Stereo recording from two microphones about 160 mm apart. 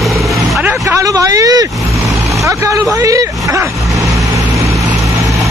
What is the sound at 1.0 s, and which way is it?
Speech, 20° right (ahead or behind).